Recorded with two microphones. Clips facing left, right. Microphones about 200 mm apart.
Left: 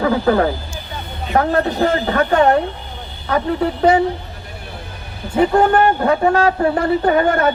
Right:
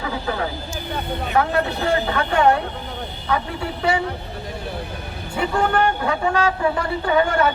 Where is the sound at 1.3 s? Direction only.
45° left (ahead or behind).